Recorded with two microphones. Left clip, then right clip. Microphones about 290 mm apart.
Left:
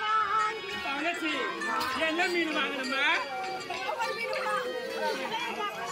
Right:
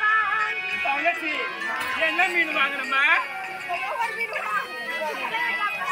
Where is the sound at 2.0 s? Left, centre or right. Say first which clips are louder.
Right 9 dB; centre.